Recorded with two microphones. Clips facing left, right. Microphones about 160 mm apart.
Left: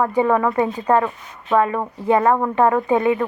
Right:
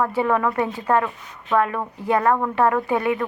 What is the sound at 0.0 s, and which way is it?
A woman's voice, 15° left (ahead or behind).